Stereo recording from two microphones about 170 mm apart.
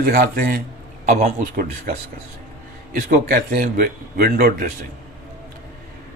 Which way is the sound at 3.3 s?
50° right (ahead or behind).